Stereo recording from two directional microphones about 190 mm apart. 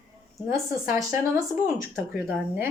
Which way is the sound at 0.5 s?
15° right (ahead or behind).